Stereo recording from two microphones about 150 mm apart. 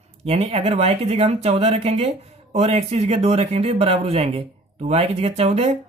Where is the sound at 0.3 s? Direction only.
45° right (ahead or behind).